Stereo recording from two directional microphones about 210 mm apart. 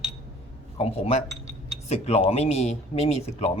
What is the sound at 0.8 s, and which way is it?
Speech, 30° left (ahead or behind).